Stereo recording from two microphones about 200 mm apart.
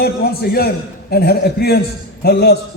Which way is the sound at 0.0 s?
50° left (ahead or behind).